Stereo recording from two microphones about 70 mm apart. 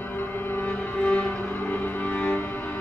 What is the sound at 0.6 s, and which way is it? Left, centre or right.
Music, centre.